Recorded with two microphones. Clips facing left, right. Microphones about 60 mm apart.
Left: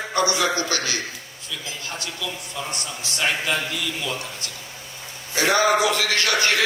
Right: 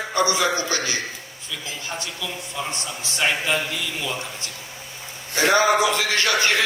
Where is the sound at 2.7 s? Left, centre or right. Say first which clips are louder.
Right 1 dB; right.